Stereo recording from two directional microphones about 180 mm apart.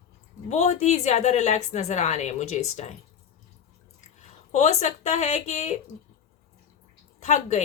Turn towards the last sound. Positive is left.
turn(degrees=40)  # may be behind; listen again after turning